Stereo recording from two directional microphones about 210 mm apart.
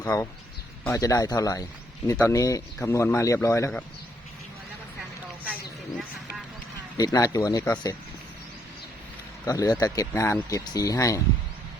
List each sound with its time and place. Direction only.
0.0 s speech: 15° left (ahead or behind)
6.9 s speech: 20° left (ahead or behind)
9.5 s speech: 15° left (ahead or behind)